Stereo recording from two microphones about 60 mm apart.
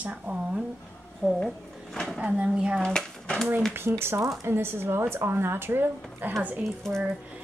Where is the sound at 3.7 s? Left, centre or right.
Right.